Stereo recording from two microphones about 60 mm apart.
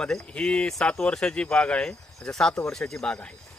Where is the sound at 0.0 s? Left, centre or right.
Centre.